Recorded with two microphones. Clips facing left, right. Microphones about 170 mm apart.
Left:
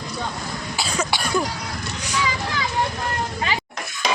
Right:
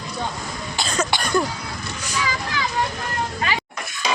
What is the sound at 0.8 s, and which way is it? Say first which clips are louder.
Cough: right 1 dB; 10° left (ahead or behind).